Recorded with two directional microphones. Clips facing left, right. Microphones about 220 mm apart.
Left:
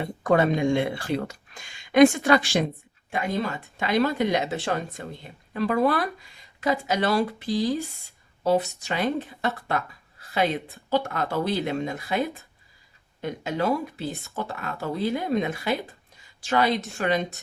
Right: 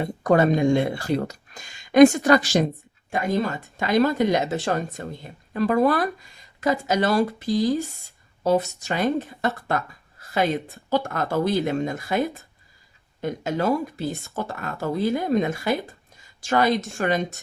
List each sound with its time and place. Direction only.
0.0 s speech: 40° right (ahead or behind)